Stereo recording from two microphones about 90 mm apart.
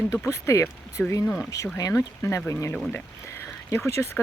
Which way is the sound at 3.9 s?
30° left (ahead or behind).